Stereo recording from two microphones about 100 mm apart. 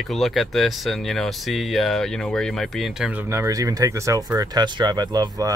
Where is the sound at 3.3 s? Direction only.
30° right (ahead or behind).